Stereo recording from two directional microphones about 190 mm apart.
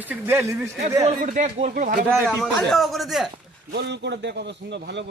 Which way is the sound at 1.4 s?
40° right (ahead or behind).